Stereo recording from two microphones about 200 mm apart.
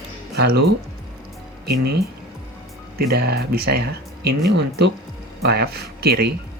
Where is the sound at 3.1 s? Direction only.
55° right (ahead or behind).